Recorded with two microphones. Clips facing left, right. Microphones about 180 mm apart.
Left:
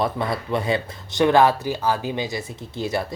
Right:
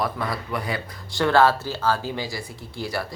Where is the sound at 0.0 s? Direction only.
25° left (ahead or behind).